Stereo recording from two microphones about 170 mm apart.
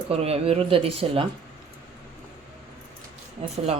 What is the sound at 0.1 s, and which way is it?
Speech, 35° right (ahead or behind).